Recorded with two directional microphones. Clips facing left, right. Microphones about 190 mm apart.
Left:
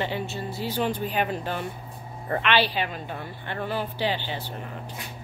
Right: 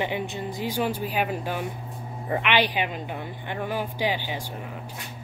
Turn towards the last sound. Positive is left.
turn(degrees=-10)  # may be behind; listen again after turning